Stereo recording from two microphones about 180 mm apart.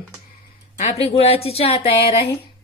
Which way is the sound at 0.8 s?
35° left (ahead or behind).